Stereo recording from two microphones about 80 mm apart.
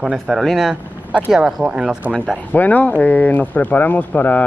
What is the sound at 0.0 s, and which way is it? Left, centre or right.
Speech, centre.